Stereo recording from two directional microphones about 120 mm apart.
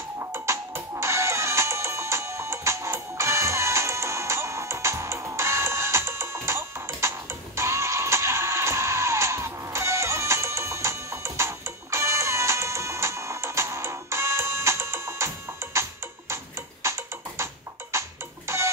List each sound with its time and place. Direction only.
0.2 s music: 25° right (ahead or behind)